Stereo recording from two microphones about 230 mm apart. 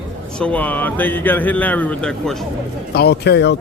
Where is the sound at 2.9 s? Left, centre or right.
Left.